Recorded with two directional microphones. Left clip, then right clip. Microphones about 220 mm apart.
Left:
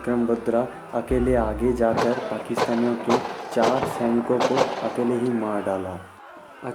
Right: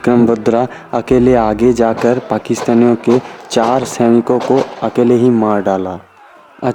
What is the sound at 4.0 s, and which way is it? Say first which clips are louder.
Speech: right 13 dB; 45° right (ahead or behind).